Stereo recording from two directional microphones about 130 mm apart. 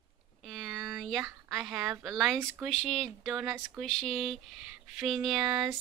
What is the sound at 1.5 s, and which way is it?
A woman's voice, centre (ahead or behind).